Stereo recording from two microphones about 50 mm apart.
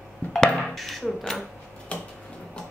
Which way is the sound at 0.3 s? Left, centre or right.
Centre.